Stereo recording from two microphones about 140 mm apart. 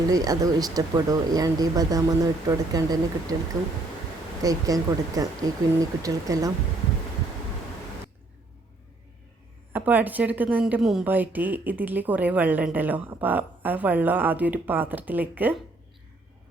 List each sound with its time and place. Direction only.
0.1 s speech: 25° right (ahead or behind)
4.4 s speech: 25° right (ahead or behind)
9.7 s a woman's voice: 10° right (ahead or behind)